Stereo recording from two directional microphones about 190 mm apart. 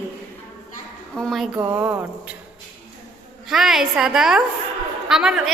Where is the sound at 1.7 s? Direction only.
10° right (ahead or behind).